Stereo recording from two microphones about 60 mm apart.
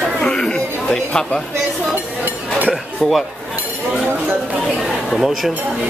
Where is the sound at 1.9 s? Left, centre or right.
Right.